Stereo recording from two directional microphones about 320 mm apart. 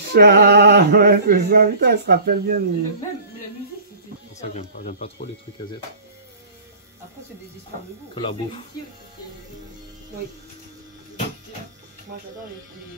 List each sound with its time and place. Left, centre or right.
0.1 s male singing: right
4.4 s speech: left
8.1 s speech: centre